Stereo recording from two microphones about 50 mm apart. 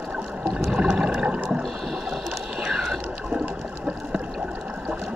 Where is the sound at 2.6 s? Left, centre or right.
Centre.